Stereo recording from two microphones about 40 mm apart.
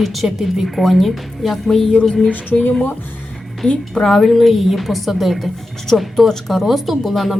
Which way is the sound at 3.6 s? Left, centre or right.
Left.